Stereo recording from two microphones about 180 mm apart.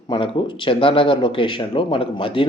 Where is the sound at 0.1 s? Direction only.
30° left (ahead or behind).